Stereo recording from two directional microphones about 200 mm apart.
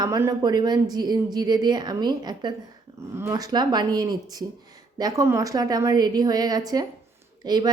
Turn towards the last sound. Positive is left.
turn(degrees=-20)  # may be behind; listen again after turning